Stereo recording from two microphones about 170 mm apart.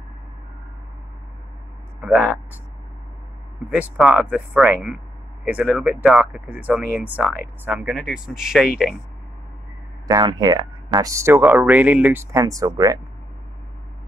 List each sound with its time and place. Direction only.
2.0 s speech: 10° right (ahead or behind)
3.7 s speech: 10° right (ahead or behind)
10.0 s speech: 20° right (ahead or behind)